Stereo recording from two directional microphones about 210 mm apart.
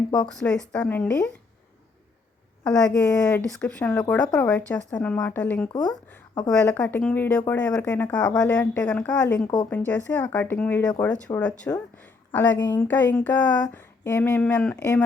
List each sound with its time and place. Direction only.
0.3 s speech: 5° left (ahead or behind)
2.6 s speech: 10° left (ahead or behind)
5.7 s speech: 20° left (ahead or behind)
6.5 s speech: 5° left (ahead or behind)
13.4 s speech: 20° left (ahead or behind)